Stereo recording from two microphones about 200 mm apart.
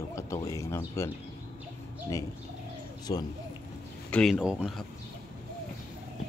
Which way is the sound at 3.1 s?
20° left (ahead or behind).